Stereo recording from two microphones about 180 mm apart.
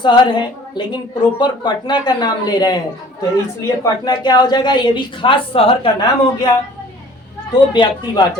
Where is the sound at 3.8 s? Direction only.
20° left (ahead or behind).